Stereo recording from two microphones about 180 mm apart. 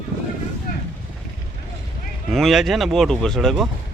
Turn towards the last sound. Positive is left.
turn(degrees=0)  # may be behind; listen again after turning